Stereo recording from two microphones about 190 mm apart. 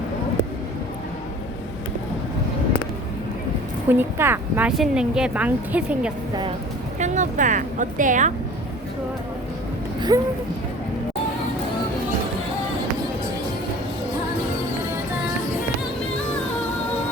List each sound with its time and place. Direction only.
3.8 s speech: 10° right (ahead or behind)
7.0 s a woman's voice: 40° right (ahead or behind)
10.1 s speech: 20° right (ahead or behind)